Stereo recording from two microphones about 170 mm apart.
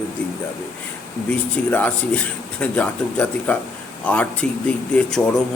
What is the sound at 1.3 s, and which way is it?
A man's voice, 10° left (ahead or behind).